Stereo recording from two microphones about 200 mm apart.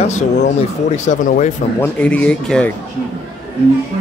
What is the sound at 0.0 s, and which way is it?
Speech, 35° left (ahead or behind).